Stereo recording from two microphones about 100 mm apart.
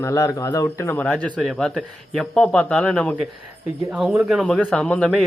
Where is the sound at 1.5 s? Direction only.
5° left (ahead or behind).